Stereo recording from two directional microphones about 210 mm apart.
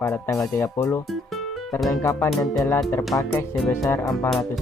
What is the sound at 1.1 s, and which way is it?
Music, centre (ahead or behind).